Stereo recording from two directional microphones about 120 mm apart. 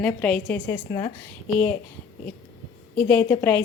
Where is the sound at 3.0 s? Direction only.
20° left (ahead or behind).